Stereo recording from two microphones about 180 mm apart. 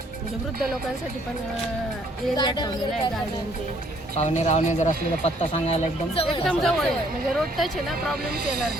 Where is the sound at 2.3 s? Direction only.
25° left (ahead or behind).